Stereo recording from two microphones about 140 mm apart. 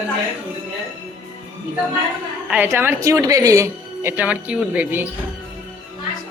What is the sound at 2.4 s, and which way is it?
Speech, 10° right (ahead or behind).